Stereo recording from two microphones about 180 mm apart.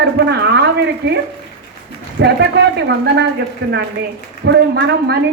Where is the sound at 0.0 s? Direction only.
70° right (ahead or behind).